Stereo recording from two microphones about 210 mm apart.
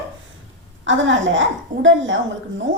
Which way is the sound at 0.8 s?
65° right (ahead or behind).